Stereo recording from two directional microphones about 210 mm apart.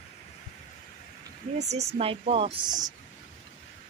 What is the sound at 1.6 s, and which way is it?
Speech, 30° right (ahead or behind).